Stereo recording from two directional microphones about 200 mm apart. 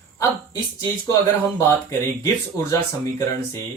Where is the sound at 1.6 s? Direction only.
15° left (ahead or behind).